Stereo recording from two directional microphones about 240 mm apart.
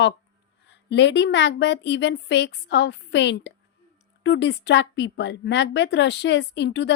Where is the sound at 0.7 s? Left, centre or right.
Left.